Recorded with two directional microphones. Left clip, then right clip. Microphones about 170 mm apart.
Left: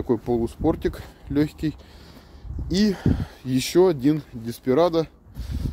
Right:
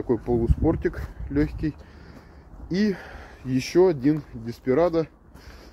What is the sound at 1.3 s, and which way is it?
Speech, 45° left (ahead or behind).